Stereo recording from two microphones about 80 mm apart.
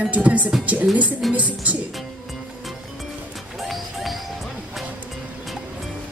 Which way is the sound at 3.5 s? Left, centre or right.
Centre.